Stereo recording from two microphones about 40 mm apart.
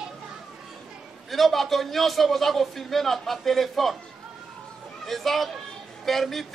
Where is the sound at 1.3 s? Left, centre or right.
Centre.